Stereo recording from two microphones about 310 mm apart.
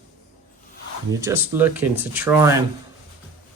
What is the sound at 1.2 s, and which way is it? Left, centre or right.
Speech, centre.